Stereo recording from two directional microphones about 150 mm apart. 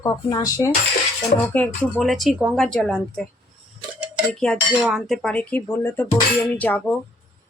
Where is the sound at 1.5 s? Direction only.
10° left (ahead or behind).